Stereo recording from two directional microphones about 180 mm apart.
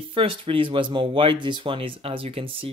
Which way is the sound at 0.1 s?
30° right (ahead or behind).